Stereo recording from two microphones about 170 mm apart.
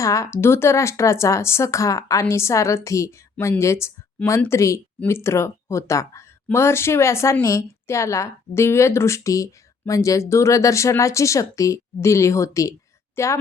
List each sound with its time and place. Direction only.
0.0 s a woman's voice: 20° left (ahead or behind)